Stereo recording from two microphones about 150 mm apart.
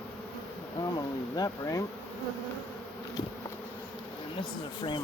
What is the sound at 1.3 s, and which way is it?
Speech, 25° left (ahead or behind).